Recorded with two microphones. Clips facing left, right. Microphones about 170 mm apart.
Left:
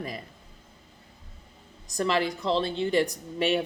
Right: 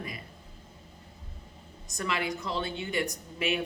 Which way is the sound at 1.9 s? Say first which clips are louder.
Left 6 dB; 35° left (ahead or behind).